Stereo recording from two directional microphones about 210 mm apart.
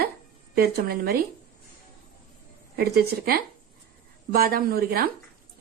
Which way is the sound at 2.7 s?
50° right (ahead or behind).